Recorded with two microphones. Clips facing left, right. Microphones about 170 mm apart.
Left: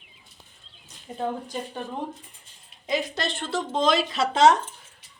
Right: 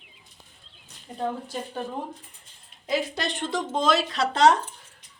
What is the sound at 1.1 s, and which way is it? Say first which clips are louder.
Speech: left 1 dB; 20° left (ahead or behind).